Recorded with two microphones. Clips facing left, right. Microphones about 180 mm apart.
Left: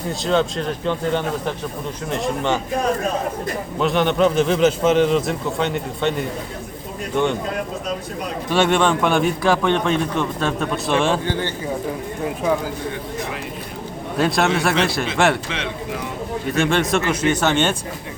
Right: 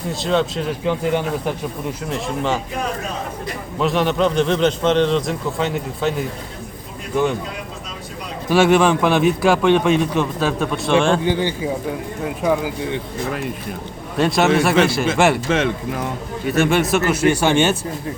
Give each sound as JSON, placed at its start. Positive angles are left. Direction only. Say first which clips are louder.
{"t": 0.1, "sound": "speech", "louder": "even", "side_deg": 0}
{"t": 3.8, "sound": "speech", "louder": "even", "side_deg": 0}
{"t": 8.4, "sound": "a man's voice", "louder": "right 4 dB", "side_deg": -5}
{"t": 11.2, "sound": "a man's voice", "louder": "right 4 dB", "side_deg": -15}
{"t": 14.2, "sound": "speech", "louder": "right 3 dB", "side_deg": 0}
{"t": 15.4, "sound": "speech", "louder": "right 7 dB", "side_deg": -45}
{"t": 16.6, "sound": "a man's voice", "louder": "right 2 dB", "side_deg": -5}